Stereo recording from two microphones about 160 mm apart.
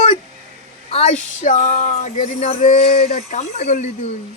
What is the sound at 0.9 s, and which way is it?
Speech, 40° left (ahead or behind).